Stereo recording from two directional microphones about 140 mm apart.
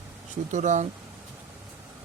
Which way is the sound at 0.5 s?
60° right (ahead or behind).